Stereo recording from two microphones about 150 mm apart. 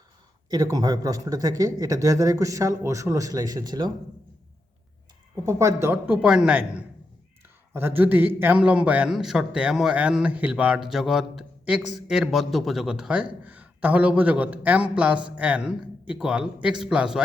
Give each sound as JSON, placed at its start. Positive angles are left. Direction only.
{"t": 0.5, "sound": "speech", "side_deg": -25}
{"t": 5.5, "sound": "a man's voice", "side_deg": -20}